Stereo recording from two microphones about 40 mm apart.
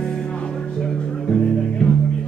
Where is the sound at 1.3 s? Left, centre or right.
Left.